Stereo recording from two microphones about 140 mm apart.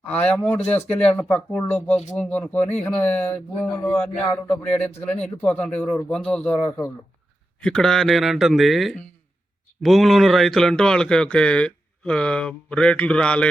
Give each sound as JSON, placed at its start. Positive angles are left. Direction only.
{"t": 0.1, "sound": "speech", "side_deg": 10}
{"t": 7.6, "sound": "speech", "side_deg": 5}